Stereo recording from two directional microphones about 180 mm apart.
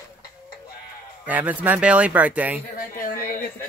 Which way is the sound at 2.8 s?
50° left (ahead or behind).